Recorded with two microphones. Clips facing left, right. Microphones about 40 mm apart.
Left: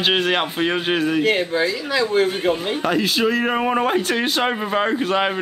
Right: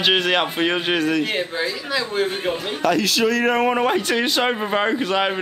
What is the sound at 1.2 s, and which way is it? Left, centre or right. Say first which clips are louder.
Speech: left 5 dB; centre.